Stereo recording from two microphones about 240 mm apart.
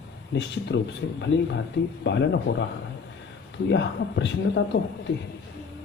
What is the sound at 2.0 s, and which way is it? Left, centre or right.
Speech, left.